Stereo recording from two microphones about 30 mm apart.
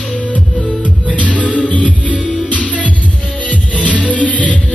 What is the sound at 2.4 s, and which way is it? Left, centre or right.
Music, left.